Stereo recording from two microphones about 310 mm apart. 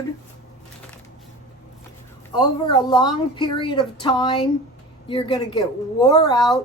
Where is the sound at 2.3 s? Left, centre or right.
Centre.